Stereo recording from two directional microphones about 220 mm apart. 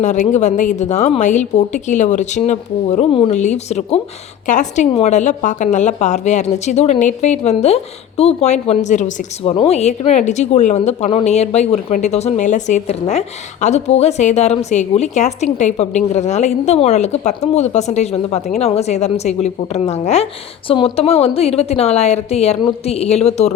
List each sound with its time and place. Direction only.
0.0 s a woman's voice: 35° left (ahead or behind)